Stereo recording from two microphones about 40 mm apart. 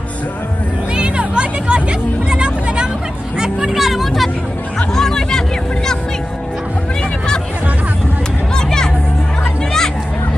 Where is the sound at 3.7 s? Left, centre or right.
Centre.